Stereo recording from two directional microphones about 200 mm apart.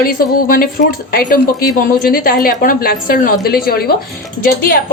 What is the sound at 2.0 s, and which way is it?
Speech, 45° left (ahead or behind).